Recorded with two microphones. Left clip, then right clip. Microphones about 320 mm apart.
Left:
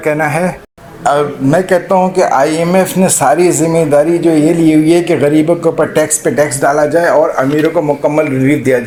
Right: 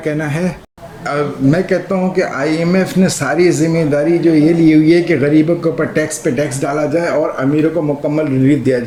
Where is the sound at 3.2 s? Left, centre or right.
Left.